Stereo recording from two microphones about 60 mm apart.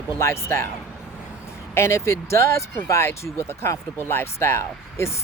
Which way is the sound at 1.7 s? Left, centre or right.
Left.